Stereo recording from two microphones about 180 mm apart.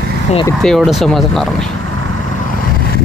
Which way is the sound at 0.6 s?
Centre (ahead or behind).